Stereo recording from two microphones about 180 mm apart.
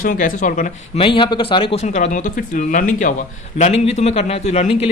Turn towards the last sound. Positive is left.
turn(degrees=35)  # may be behind; listen again after turning